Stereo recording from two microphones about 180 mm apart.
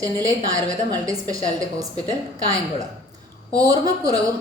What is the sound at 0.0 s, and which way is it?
A woman's voice, 20° right (ahead or behind).